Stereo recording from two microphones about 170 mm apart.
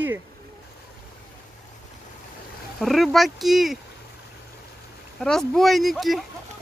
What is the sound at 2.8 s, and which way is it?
Speech, centre (ahead or behind).